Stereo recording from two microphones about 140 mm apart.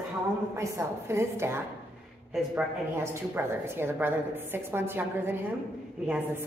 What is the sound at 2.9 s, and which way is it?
A woman's voice, 15° right (ahead or behind).